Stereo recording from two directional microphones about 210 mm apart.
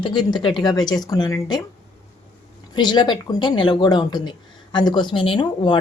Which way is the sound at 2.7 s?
20° left (ahead or behind).